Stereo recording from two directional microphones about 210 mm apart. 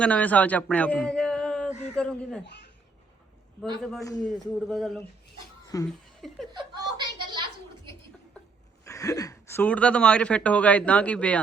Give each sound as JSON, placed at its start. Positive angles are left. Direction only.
{"t": 0.0, "sound": "a man's voice", "side_deg": 5}
{"t": 2.4, "sound": "speech", "side_deg": 55}
{"t": 3.8, "sound": "speech", "side_deg": 0}
{"t": 5.6, "sound": "speech", "side_deg": 15}
{"t": 6.2, "sound": "speech", "side_deg": 0}
{"t": 6.5, "sound": "a sound", "side_deg": -20}
{"t": 8.8, "sound": "speech", "side_deg": 15}